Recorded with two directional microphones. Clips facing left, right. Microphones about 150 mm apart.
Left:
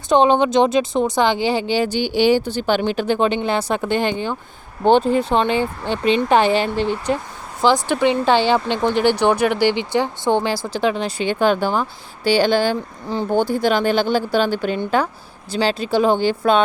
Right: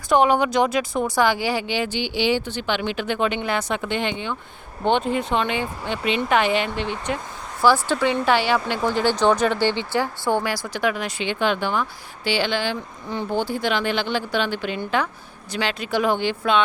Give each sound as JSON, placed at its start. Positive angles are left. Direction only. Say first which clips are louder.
{"t": 0.1, "sound": "speech", "louder": "left 3 dB", "side_deg": 25}
{"t": 7.6, "sound": "speech", "louder": "left 2 dB", "side_deg": 20}
{"t": 11.2, "sound": "speech", "louder": "left 6 dB", "side_deg": 40}